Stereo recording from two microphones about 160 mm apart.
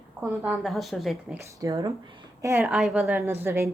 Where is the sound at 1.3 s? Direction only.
20° right (ahead or behind).